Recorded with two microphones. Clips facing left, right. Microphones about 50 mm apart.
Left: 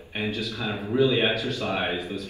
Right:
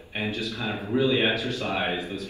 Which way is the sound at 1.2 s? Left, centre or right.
Right.